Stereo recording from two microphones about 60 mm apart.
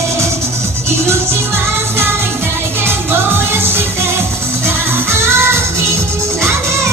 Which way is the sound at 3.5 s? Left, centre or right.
Right.